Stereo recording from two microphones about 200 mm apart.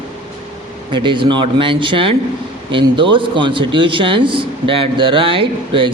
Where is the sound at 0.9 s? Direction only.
25° right (ahead or behind).